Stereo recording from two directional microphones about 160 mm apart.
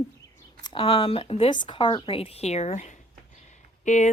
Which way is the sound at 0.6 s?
30° left (ahead or behind).